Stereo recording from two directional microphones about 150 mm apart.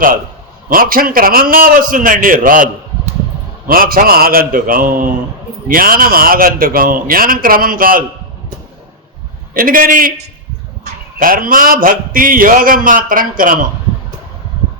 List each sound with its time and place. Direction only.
0.7 s speech: 70° right (ahead or behind)
3.7 s speech: 75° right (ahead or behind)
9.6 s speech: 70° right (ahead or behind)
11.2 s speech: 70° right (ahead or behind)